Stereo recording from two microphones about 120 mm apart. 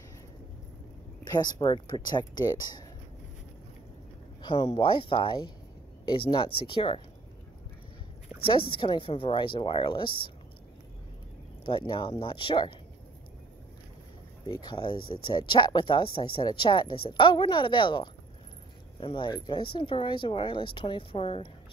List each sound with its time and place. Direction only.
1.4 s speech: 35° left (ahead or behind)
4.4 s speech: 40° left (ahead or behind)
8.5 s speech: 45° left (ahead or behind)
11.6 s speech: 45° left (ahead or behind)
14.5 s speech: 40° left (ahead or behind)